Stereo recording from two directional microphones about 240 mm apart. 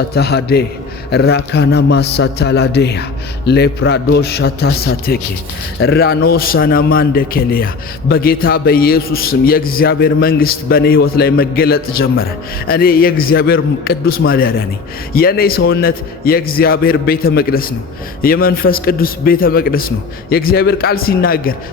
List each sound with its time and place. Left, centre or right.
0.1 s a man's voice: left